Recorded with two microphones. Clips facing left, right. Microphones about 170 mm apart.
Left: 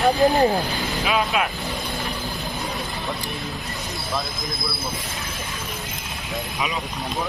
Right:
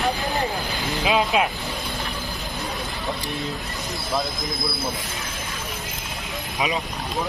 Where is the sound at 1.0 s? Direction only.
20° right (ahead or behind).